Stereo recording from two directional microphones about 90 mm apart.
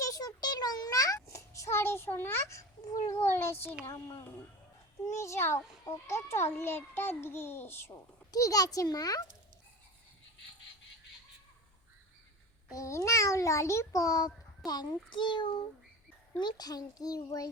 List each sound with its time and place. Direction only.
0.0 s a sound: 40° left (ahead or behind)
3.8 s a child's voice: 30° left (ahead or behind)
8.3 s a child's voice: 40° left (ahead or behind)
12.7 s a child's voice: 35° left (ahead or behind)